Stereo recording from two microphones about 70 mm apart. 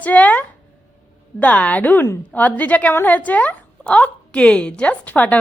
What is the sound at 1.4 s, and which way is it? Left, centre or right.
A woman's voice, left.